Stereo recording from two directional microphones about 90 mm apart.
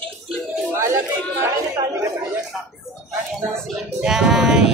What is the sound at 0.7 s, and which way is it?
Speech, 30° right (ahead or behind).